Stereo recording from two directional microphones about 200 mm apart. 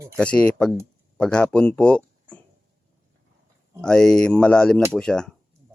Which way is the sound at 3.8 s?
5° left (ahead or behind).